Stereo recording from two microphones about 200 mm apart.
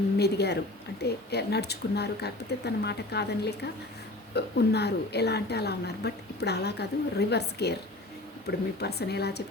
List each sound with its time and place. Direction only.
0.2 s a woman's voice: 55° left (ahead or behind)